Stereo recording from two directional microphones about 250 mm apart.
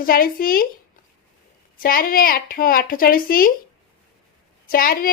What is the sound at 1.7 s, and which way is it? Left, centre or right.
A woman's voice, left.